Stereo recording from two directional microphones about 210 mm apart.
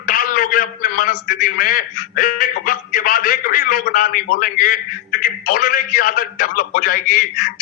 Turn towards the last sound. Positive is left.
turn(degrees=40)  # may be behind; listen again after turning